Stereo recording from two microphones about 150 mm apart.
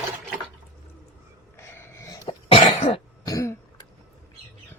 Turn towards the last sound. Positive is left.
turn(degrees=20)  # may be behind; listen again after turning